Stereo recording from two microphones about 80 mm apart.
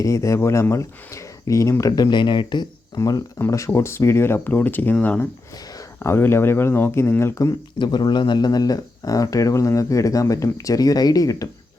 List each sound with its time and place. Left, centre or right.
0.0 s speech: left
1.8 s speech: left
2.9 s speech: left
3.3 s speech: left; by 5.2 s centre
6.0 s speech: left
7.8 s speech: left